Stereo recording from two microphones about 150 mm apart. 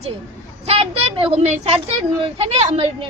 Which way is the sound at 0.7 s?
40° right (ahead or behind).